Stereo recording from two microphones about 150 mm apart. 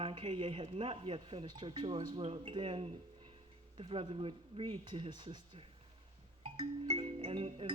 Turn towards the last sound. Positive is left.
turn(degrees=-40)  # may be behind; listen again after turning